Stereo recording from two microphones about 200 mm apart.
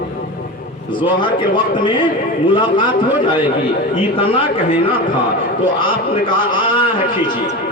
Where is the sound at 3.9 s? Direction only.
25° left (ahead or behind).